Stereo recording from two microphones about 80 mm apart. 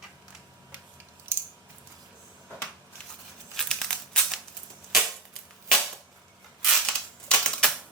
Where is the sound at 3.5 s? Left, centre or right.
Centre.